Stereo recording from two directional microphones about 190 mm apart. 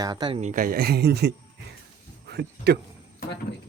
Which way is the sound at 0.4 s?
45° right (ahead or behind).